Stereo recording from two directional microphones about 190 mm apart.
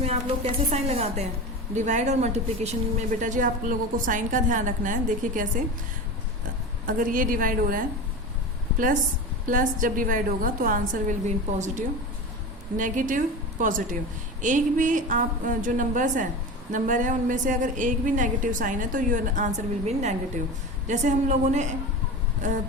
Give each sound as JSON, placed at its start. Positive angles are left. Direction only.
{"t": 0.0, "sound": "a woman's voice", "side_deg": -35}
{"t": 6.8, "sound": "speech", "side_deg": -45}
{"t": 9.5, "sound": "a woman's voice", "side_deg": -45}